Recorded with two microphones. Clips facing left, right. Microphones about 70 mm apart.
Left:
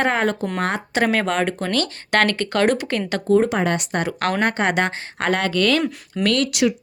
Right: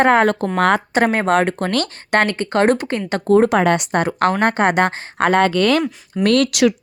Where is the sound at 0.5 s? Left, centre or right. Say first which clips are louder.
Right 8 dB; right.